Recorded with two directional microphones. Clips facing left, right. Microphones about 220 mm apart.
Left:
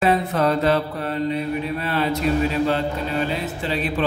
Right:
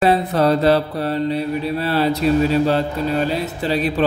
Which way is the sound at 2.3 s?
35° right (ahead or behind).